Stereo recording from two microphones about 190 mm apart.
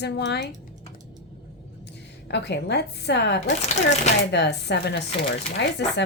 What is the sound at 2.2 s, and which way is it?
Speech, 65° left (ahead or behind).